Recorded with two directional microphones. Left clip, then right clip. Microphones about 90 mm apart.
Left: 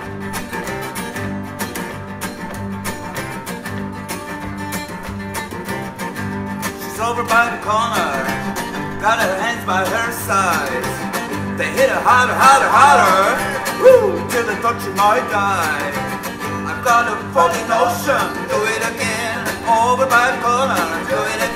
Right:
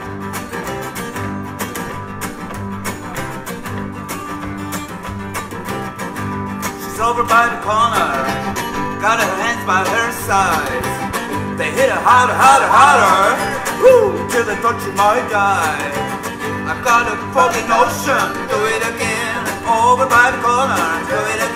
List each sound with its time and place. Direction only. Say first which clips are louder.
6.6 s music: right 4 dB; 30° right (ahead or behind)